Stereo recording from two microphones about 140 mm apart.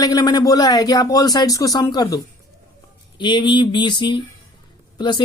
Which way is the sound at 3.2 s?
35° left (ahead or behind).